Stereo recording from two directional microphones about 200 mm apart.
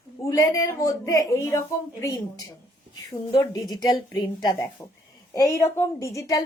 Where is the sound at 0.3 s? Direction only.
15° left (ahead or behind).